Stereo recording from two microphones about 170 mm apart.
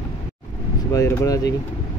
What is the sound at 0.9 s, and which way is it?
Speech, 20° left (ahead or behind).